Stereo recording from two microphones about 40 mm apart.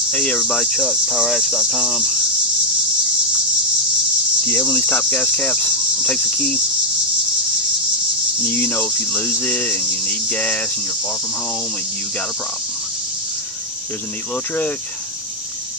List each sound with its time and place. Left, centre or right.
0.4 s cricket: centre
4.5 s cricket: left
5.2 s cricket: centre
8.5 s cricket: left
8.8 s cricket: left